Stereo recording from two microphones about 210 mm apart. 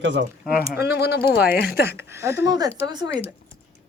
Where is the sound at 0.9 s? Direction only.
50° left (ahead or behind).